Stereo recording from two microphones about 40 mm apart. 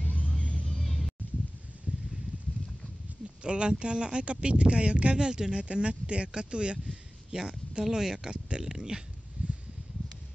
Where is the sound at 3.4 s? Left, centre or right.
Right.